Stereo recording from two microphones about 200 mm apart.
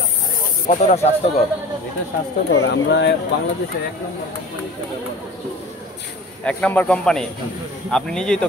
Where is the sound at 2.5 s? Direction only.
65° left (ahead or behind).